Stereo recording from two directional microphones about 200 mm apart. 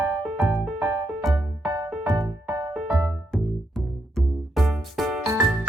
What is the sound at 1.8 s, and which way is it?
Music, 5° right (ahead or behind).